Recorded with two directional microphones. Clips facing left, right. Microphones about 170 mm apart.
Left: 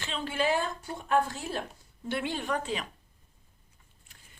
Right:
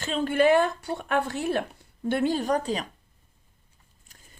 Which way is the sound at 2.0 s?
45° right (ahead or behind).